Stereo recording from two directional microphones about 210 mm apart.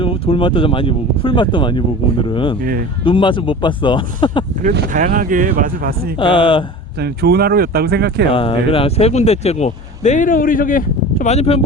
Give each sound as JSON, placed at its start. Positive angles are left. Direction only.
{"t": 0.0, "sound": "speech", "side_deg": 25}
{"t": 4.9, "sound": "speech", "side_deg": -40}
{"t": 6.1, "sound": "speech", "side_deg": 25}
{"t": 7.0, "sound": "speech", "side_deg": -50}
{"t": 8.3, "sound": "speech", "side_deg": 25}